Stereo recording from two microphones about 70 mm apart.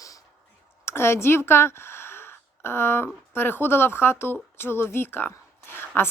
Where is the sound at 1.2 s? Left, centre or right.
Left.